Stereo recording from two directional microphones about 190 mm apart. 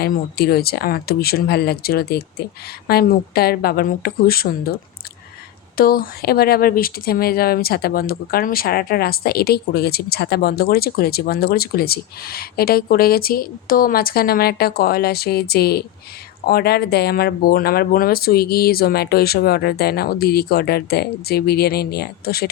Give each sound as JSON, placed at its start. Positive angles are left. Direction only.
{"t": 0.0, "sound": "speech", "side_deg": 55}